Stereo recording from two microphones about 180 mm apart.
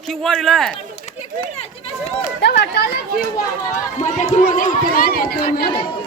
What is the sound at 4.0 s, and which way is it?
Speech, 40° left (ahead or behind).